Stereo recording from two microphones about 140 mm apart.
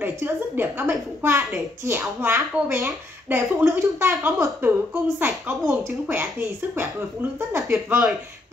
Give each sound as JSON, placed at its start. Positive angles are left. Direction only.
{"t": 0.0, "sound": "a woman's voice", "side_deg": -15}
{"t": 7.3, "sound": "a woman's voice", "side_deg": -15}
{"t": 7.9, "sound": "speech", "side_deg": -5}